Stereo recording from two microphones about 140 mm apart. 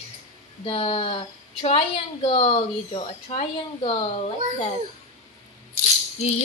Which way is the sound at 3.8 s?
35° left (ahead or behind).